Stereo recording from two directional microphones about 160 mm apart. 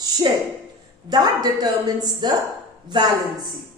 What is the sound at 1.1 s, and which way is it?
A woman's voice, 25° right (ahead or behind).